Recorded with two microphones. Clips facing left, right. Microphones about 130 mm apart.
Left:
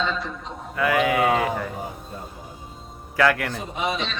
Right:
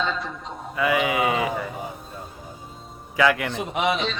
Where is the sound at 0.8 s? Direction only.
5° right (ahead or behind).